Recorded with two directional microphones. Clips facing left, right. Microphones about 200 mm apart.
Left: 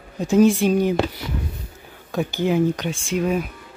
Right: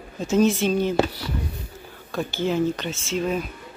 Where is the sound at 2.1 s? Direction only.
15° left (ahead or behind).